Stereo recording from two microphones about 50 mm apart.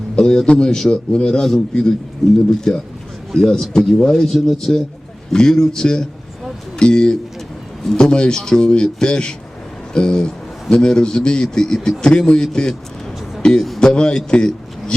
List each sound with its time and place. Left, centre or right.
0.2 s a man's voice: centre